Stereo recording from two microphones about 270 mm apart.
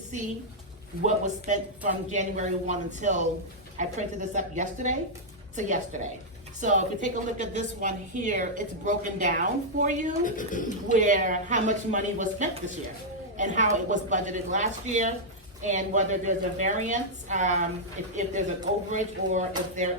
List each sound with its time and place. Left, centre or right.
1.0 s a woman's voice: right
10.2 s speech: left
10.9 s a woman's voice: right
18.9 s a woman's voice: right